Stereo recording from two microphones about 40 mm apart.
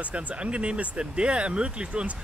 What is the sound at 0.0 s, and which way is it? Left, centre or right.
Speech, right.